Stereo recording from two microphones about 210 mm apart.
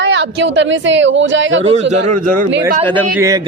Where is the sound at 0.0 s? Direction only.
60° right (ahead or behind).